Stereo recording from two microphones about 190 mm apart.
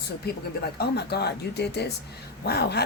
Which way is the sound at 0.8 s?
60° left (ahead or behind).